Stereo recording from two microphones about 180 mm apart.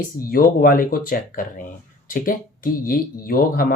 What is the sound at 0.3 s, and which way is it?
Speech, 55° left (ahead or behind).